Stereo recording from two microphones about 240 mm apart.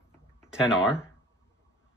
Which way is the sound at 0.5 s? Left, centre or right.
Centre.